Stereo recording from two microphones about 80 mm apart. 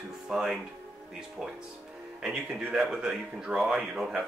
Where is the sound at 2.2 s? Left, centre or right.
Centre.